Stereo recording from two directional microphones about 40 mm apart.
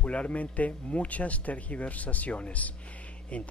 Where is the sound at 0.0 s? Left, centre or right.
Left.